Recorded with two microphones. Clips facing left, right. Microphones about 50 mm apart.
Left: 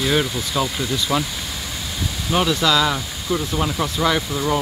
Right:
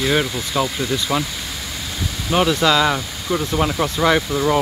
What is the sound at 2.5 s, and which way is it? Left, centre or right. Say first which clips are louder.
Speech: right 2 dB; right.